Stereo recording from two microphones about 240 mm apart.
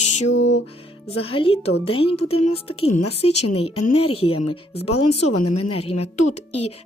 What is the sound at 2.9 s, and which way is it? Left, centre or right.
Speech, left.